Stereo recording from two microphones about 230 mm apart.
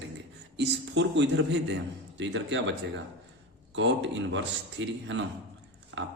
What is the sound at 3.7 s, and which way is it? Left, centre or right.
A man's voice, right.